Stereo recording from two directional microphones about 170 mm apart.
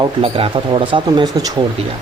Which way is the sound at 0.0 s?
30° right (ahead or behind).